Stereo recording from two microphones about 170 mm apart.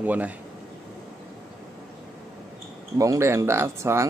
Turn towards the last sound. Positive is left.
turn(degrees=-15)  # may be behind; listen again after turning